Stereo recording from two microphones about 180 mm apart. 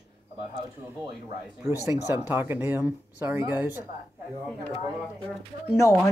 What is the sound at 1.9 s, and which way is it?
Speech, 10° right (ahead or behind).